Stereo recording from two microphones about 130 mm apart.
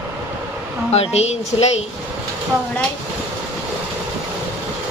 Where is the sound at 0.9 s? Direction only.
55° left (ahead or behind).